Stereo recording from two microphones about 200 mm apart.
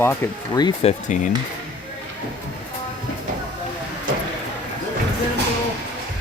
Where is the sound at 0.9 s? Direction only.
40° left (ahead or behind).